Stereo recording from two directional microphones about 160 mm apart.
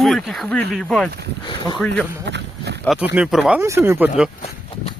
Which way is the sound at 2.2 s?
90° right.